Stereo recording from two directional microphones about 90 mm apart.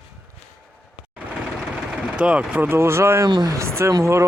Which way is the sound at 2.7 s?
30° right (ahead or behind).